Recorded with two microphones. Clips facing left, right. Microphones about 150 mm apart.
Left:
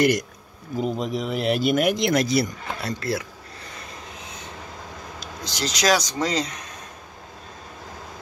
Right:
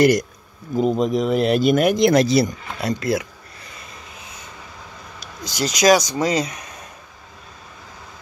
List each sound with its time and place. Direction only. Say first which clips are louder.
0.0 s speech: right 5 dB; 40° right (ahead or behind)
2.8 s speech: right 6 dB; 15° right (ahead or behind)
5.2 s speech: right 5 dB; 10° right (ahead or behind)